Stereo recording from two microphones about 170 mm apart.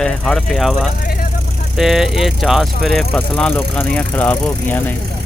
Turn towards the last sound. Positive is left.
turn(degrees=10)  # may be behind; listen again after turning